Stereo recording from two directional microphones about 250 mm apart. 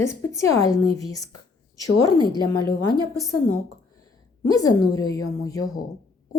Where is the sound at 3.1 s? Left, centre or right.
Centre.